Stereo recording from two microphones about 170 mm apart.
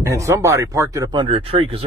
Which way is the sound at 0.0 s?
20° right (ahead or behind).